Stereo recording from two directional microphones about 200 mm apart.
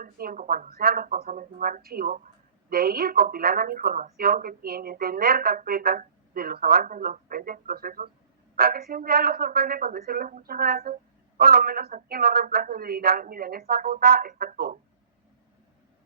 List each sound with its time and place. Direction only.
0.0 s speech: 45° right (ahead or behind)